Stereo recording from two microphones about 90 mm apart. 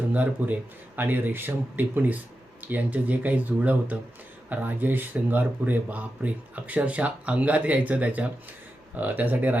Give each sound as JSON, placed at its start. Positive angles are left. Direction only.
{"t": 0.1, "sound": "speech", "side_deg": -15}